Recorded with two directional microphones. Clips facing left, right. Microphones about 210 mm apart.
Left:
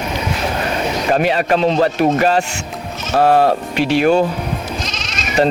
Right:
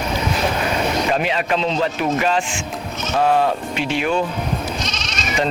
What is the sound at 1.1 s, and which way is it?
Speech, 45° left (ahead or behind).